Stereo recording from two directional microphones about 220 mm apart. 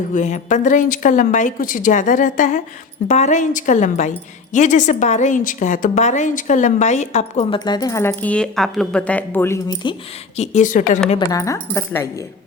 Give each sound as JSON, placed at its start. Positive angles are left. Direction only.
{"t": 0.1, "sound": "a woman's voice", "side_deg": 35}
{"t": 7.6, "sound": "speech", "side_deg": 20}
{"t": 10.3, "sound": "a woman's voice", "side_deg": 30}
{"t": 11.3, "sound": "speech", "side_deg": 15}